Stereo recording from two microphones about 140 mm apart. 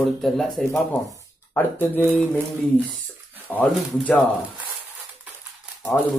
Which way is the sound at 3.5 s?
10° left (ahead or behind).